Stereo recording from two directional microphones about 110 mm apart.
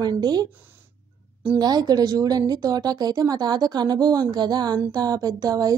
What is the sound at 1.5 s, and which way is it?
A woman's voice, 40° right (ahead or behind).